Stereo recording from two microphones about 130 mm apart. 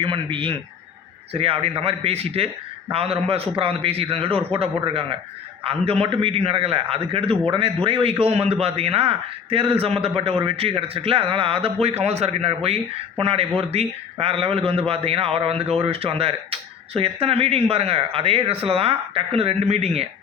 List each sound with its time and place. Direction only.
0.0 s a man's voice: 40° right (ahead or behind)
8.2 s a man's voice: 50° right (ahead or behind)